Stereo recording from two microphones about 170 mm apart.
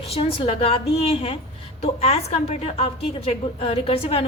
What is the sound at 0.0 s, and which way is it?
A woman's voice, 35° left (ahead or behind).